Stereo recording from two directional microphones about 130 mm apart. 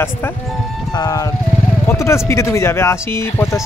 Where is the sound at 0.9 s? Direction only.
30° left (ahead or behind).